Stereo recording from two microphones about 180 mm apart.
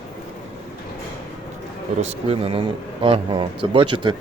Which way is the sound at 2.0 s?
30° right (ahead or behind).